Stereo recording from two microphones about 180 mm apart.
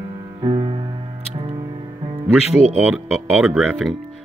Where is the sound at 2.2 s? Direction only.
5° right (ahead or behind).